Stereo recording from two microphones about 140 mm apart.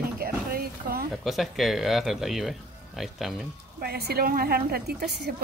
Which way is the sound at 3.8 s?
90° right.